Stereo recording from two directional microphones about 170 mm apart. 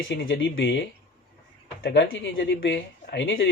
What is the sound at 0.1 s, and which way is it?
Speech, 90° left.